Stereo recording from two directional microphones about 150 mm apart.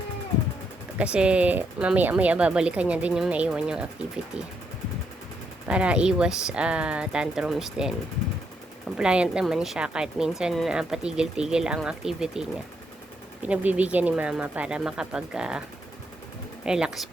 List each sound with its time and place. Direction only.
0.9 s speech: 5° right (ahead or behind)
5.6 s speech: 10° right (ahead or behind)
9.0 s speech: 5° right (ahead or behind)
16.6 s speech: 5° right (ahead or behind)